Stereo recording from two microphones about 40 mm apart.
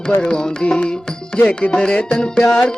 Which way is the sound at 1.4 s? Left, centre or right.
Left.